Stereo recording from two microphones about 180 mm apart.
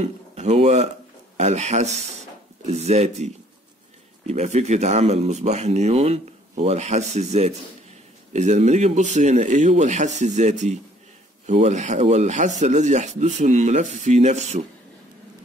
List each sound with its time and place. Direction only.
0.4 s speech: 40° right (ahead or behind)
4.3 s speech: 40° right (ahead or behind)